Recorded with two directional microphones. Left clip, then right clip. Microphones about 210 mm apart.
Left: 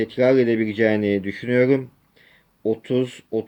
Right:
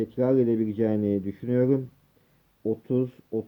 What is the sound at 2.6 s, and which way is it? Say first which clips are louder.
Speech: left 5 dB; 15° left (ahead or behind).